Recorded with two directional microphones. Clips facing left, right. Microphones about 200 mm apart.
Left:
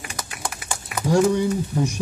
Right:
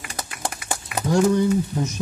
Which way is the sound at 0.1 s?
35° right (ahead or behind).